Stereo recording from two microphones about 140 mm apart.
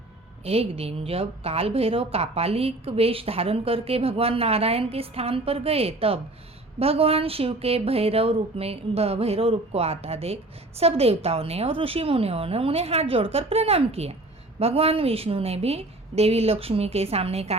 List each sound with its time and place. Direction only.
0.4 s a woman's voice: 45° right (ahead or behind)